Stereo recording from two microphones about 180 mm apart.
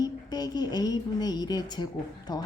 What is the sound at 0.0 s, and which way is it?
A woman's voice, 20° left (ahead or behind).